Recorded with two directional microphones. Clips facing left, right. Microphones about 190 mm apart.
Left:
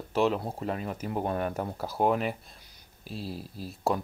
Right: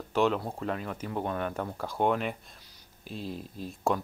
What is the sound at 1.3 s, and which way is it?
Speech, 40° left (ahead or behind).